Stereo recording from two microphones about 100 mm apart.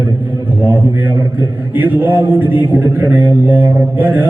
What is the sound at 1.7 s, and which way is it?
A man's voice, 20° right (ahead or behind).